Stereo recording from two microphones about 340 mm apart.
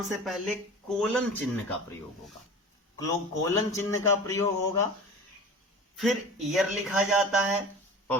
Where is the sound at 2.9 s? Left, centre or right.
Centre.